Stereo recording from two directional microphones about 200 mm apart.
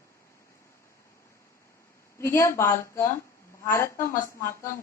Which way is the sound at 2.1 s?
15° left (ahead or behind).